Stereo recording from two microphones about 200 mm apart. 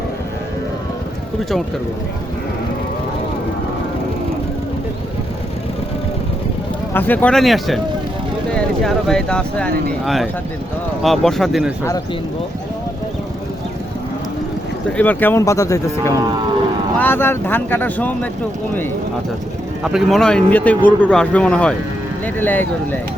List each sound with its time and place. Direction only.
6.9 s speech: 10° left (ahead or behind)
11.0 s speech: centre (ahead or behind)
14.9 s speech: 10° left (ahead or behind)
19.8 s speech: centre (ahead or behind)